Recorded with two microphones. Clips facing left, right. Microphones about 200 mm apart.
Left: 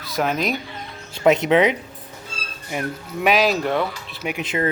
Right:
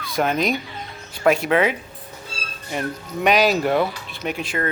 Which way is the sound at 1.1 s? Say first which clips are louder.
Left 2 dB; 20° left (ahead or behind).